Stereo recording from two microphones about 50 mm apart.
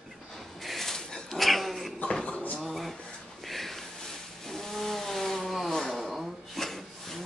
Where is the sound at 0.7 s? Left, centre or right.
Centre.